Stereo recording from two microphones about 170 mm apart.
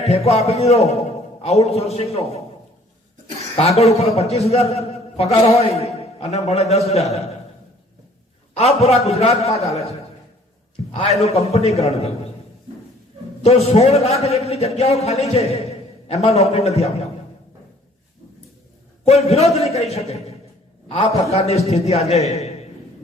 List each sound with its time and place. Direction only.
0.1 s a man's voice: 40° left (ahead or behind)
3.5 s a man's voice: 40° left (ahead or behind)
8.5 s a man's voice: 40° left (ahead or behind)
13.4 s a man's voice: 35° left (ahead or behind)
19.0 s a man's voice: 40° left (ahead or behind)